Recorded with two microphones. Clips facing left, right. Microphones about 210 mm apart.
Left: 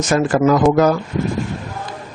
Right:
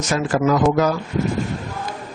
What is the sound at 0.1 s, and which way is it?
Speech, 55° left (ahead or behind).